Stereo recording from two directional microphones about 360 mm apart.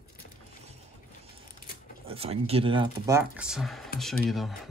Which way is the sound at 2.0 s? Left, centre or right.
Centre.